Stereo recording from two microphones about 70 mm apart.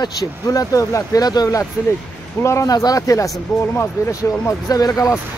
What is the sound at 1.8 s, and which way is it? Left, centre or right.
Speech, left.